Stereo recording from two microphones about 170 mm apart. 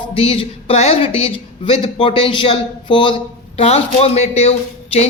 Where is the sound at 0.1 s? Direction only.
35° left (ahead or behind).